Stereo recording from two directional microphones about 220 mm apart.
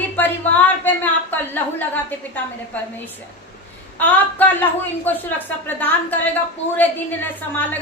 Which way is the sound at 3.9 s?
10° left (ahead or behind).